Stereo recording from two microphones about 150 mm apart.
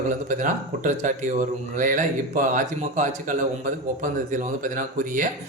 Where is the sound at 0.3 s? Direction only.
60° right (ahead or behind).